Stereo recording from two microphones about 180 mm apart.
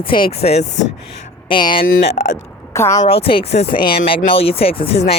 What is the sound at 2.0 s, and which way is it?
Speech, 35° left (ahead or behind).